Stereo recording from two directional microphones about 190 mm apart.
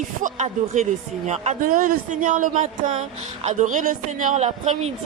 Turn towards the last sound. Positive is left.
turn(degrees=-35)  # may be behind; listen again after turning